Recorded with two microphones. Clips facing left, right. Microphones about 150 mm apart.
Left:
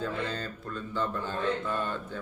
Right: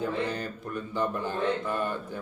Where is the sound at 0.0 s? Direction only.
15° right (ahead or behind).